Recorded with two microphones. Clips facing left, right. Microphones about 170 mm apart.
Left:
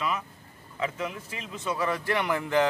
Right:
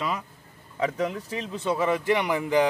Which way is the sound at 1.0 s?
35° right (ahead or behind).